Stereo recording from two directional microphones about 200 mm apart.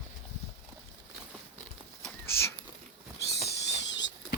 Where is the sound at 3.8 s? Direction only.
60° left (ahead or behind).